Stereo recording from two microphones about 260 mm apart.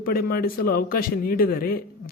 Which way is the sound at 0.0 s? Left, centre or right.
Left.